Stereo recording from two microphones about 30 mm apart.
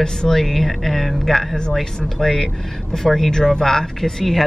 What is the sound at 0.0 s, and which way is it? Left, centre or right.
Speech, left.